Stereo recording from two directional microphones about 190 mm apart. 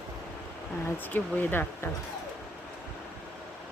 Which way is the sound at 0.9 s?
10° left (ahead or behind).